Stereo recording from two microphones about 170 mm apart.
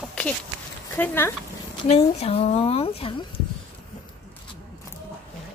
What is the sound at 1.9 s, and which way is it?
Speech, 35° left (ahead or behind).